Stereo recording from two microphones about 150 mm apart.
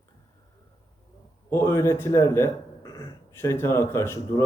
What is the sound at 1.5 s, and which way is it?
Speech, 15° left (ahead or behind).